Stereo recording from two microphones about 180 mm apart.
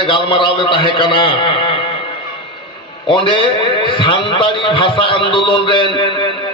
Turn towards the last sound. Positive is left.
turn(degrees=25)  # may be behind; listen again after turning